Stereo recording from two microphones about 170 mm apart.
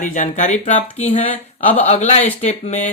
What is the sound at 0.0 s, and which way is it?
Speech, 50° left (ahead or behind).